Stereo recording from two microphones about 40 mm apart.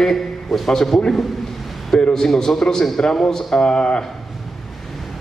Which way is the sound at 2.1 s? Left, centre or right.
Centre.